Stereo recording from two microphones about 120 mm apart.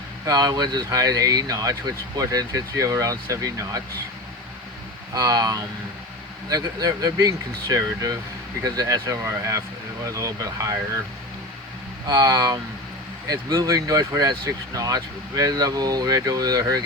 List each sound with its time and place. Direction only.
0.3 s speech: 35° right (ahead or behind)
5.1 s speech: 30° right (ahead or behind)
12.0 s speech: 35° right (ahead or behind)